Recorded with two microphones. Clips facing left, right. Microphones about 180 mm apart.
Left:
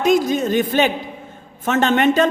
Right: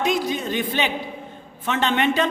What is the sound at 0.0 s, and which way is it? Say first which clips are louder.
A man's voice: left 7 dB; 45° left (ahead or behind).